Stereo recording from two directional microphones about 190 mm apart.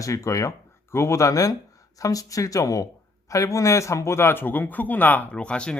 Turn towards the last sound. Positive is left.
turn(degrees=5)  # may be behind; listen again after turning